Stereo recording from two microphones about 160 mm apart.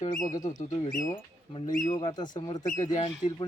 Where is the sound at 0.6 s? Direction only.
55° left (ahead or behind).